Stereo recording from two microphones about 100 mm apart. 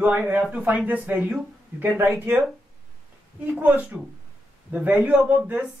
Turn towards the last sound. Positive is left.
turn(degrees=-15)  # may be behind; listen again after turning